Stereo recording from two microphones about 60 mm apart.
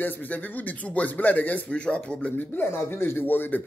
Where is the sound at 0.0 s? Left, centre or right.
Left.